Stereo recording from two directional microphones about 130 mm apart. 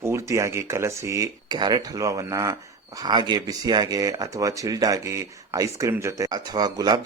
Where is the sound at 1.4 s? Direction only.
35° right (ahead or behind).